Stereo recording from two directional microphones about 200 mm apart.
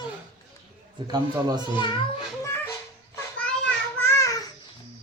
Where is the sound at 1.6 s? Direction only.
25° left (ahead or behind).